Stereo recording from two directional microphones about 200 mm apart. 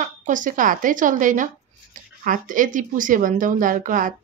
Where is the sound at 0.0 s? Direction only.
40° right (ahead or behind).